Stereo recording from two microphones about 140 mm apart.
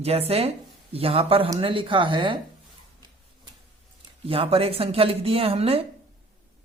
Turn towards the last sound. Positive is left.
turn(degrees=-45)  # may be behind; listen again after turning